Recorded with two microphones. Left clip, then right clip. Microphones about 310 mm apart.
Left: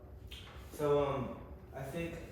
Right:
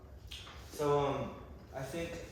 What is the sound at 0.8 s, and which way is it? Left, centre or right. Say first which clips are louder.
Speech: even; right.